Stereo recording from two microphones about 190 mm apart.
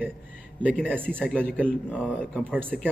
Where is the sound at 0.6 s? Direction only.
10° right (ahead or behind).